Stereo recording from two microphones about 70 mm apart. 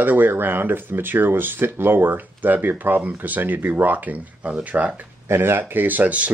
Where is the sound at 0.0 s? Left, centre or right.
Right.